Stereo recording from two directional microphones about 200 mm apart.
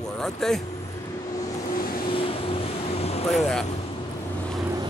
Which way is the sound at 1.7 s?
45° left (ahead or behind).